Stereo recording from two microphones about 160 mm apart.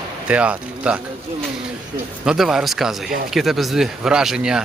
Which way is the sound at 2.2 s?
5° right (ahead or behind).